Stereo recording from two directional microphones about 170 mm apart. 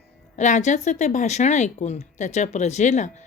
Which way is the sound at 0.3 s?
45° left (ahead or behind).